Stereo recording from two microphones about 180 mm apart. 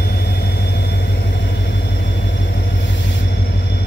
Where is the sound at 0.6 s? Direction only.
70° left (ahead or behind).